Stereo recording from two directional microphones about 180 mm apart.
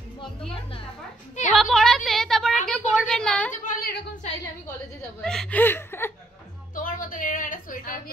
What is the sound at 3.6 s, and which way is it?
Speech, 45° left (ahead or behind).